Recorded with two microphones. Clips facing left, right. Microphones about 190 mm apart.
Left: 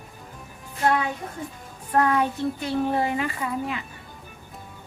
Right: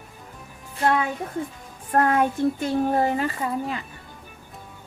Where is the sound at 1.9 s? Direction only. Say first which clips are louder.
Right 1 dB; 50° right (ahead or behind).